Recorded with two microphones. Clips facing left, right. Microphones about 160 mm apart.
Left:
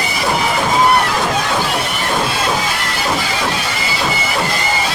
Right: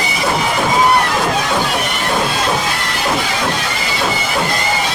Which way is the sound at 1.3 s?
Centre (ahead or behind).